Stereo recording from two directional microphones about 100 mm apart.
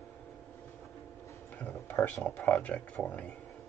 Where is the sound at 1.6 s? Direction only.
15° left (ahead or behind).